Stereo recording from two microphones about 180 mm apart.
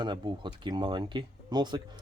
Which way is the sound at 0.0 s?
25° right (ahead or behind).